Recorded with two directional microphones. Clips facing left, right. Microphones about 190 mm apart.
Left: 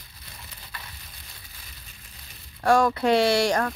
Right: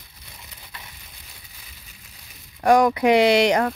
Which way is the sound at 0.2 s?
20° right (ahead or behind).